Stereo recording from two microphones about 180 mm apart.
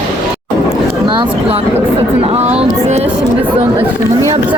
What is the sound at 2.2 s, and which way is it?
Speech, 35° right (ahead or behind).